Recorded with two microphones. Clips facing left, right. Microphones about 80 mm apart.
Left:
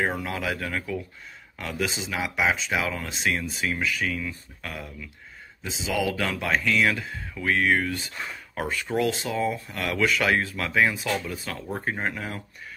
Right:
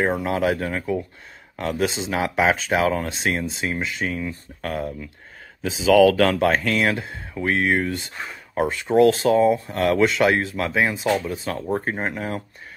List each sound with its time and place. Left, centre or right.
0.2 s speech: right
3.6 s speech: right
5.6 s speech: right
9.2 s speech: right